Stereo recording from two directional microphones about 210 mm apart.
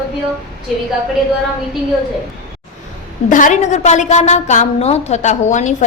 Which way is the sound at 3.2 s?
40° left (ahead or behind).